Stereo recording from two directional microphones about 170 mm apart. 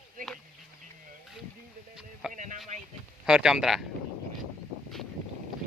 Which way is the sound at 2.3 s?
50° right (ahead or behind).